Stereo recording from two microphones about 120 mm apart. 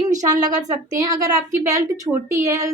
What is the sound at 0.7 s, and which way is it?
A woman's voice, 30° right (ahead or behind).